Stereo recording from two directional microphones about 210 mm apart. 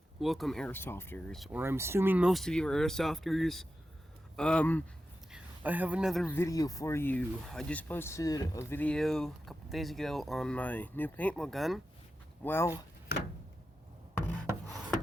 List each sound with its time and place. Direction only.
0.2 s speech: centre (ahead or behind)
1.5 s speech: 10° right (ahead or behind); by 4.8 s 5° left (ahead or behind)
5.3 s speech: 10° right (ahead or behind)
6.3 s speech: 15° left (ahead or behind)
12.4 s speech: 10° left (ahead or behind)
14.7 s filing: centre (ahead or behind)